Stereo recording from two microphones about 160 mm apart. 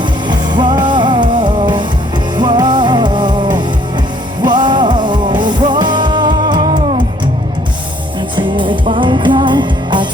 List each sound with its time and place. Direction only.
0.3 s music: 30° right (ahead or behind)
8.4 s music: 30° right (ahead or behind)